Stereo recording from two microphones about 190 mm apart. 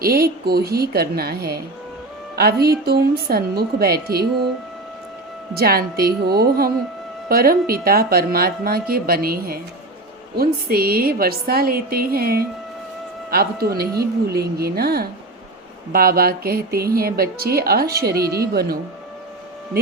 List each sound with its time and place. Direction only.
0.0 s a woman's voice: 55° right (ahead or behind)
5.5 s a woman's voice: 55° right (ahead or behind)